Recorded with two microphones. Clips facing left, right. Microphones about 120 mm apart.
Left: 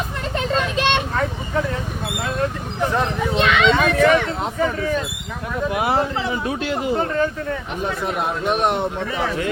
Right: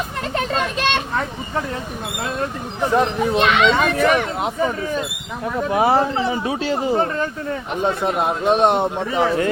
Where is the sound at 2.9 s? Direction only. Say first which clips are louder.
Right 6 dB; 15° right (ahead or behind).